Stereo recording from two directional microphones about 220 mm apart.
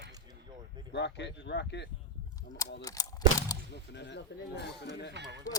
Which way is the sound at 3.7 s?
50° left (ahead or behind).